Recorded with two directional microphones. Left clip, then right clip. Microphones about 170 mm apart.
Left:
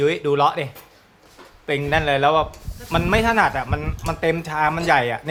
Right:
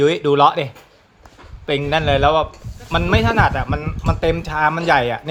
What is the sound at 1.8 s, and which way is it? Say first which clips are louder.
Speech: right 2 dB; 15° right (ahead or behind).